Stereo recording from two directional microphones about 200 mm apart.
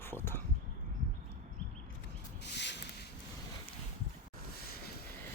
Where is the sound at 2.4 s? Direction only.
60° left (ahead or behind).